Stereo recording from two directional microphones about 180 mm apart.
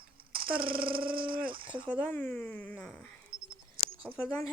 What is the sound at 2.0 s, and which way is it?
Speech, 10° left (ahead or behind).